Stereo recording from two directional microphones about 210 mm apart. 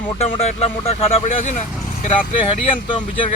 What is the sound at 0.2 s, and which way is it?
Speech, 30° left (ahead or behind).